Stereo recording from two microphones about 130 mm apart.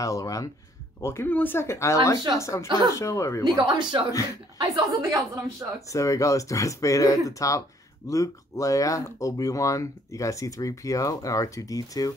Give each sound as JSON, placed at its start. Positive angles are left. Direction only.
{"t": 0.0, "sound": "speech", "side_deg": 25}
{"t": 3.4, "sound": "a woman's voice", "side_deg": -35}
{"t": 5.9, "sound": "speech", "side_deg": 25}